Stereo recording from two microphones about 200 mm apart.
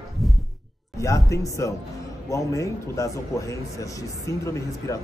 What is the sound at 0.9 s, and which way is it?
A man's voice, 15° left (ahead or behind).